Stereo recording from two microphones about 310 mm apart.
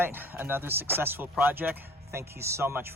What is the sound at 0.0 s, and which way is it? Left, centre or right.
Speech, centre.